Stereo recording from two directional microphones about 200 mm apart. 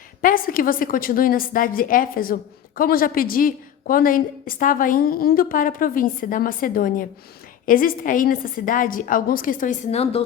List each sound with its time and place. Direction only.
0.2 s a woman's voice: 45° left (ahead or behind)